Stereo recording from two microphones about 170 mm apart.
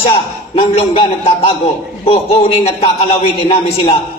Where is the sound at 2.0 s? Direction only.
35° left (ahead or behind).